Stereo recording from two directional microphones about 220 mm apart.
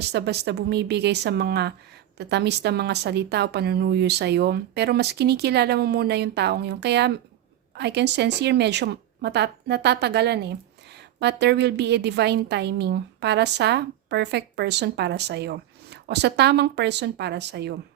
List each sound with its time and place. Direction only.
0.1 s a woman's voice: 50° right (ahead or behind)